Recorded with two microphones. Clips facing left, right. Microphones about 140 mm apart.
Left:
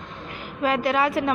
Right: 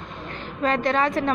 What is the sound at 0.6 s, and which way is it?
Speech, 5° left (ahead or behind).